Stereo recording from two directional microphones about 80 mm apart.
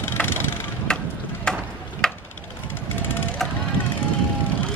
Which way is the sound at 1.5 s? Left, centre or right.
Centre.